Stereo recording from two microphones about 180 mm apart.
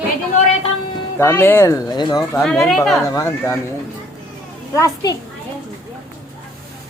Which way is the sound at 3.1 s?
15° left (ahead or behind).